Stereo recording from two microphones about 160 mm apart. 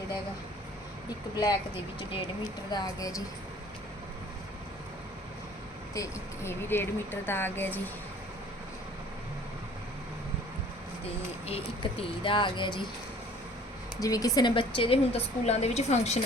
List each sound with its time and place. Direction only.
2.1 s a woman's voice: 25° left (ahead or behind)
5.9 s speech: 20° left (ahead or behind)
11.4 s a woman's voice: 35° left (ahead or behind)
14.0 s a woman's voice: 20° left (ahead or behind); by 16.2 s 45° left (ahead or behind)